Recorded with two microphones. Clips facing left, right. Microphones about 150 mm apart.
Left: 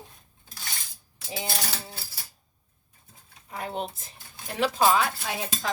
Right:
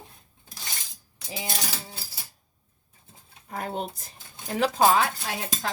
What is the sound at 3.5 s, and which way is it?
Speech, 45° right (ahead or behind).